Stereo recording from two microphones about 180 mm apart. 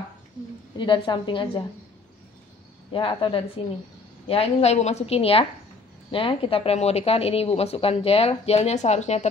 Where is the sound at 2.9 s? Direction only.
30° left (ahead or behind).